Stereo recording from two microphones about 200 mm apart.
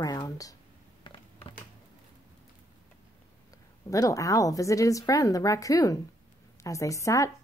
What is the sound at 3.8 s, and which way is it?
Speech, 15° left (ahead or behind).